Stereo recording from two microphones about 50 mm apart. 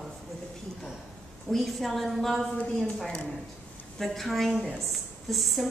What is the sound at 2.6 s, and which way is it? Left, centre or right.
Speech, left.